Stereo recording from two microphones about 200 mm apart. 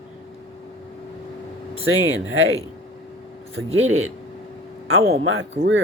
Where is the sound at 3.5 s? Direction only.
80° right.